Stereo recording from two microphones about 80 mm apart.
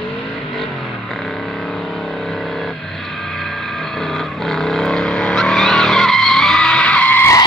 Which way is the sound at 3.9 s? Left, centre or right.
Centre.